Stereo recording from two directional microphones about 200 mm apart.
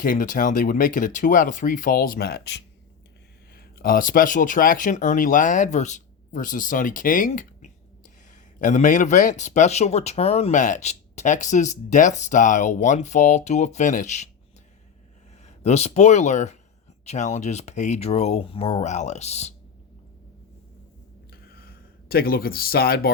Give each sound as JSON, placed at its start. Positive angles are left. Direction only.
{"t": 0.0, "sound": "speech", "side_deg": 40}
{"t": 15.4, "sound": "speech", "side_deg": 35}
{"t": 22.1, "sound": "speech", "side_deg": 50}